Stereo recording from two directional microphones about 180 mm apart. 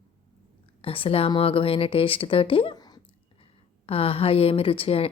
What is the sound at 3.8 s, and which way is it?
A woman's voice, 30° left (ahead or behind).